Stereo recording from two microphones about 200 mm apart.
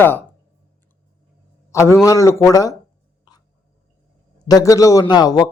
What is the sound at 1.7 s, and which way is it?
A man's voice, 15° left (ahead or behind).